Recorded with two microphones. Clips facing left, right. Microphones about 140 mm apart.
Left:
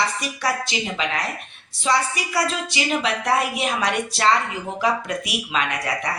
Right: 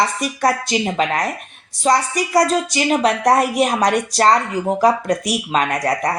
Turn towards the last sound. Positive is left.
turn(degrees=-45)  # may be behind; listen again after turning